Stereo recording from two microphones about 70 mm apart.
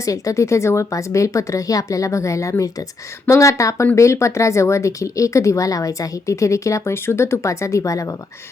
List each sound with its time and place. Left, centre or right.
0.0 s speech: left